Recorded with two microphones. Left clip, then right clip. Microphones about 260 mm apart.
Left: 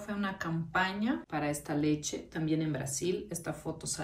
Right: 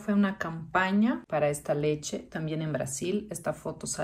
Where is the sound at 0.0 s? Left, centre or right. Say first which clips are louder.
Right 6 dB; centre.